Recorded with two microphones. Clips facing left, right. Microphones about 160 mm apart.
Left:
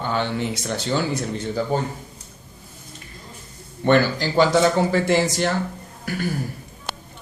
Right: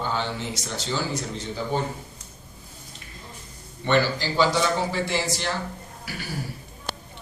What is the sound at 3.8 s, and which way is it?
Speech, 50° left (ahead or behind).